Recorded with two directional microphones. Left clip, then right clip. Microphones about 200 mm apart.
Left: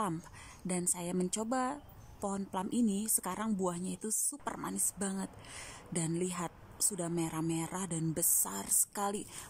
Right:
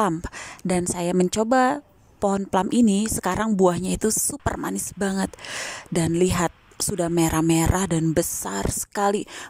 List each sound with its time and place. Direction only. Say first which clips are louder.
0.7 s speech: right 14 dB; 50° right (ahead or behind)